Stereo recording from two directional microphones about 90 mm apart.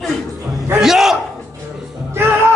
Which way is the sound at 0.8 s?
5° right (ahead or behind).